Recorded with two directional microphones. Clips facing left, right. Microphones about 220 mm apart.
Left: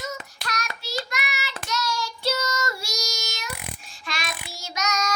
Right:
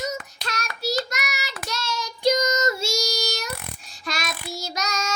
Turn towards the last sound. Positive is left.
turn(degrees=-30)  # may be behind; listen again after turning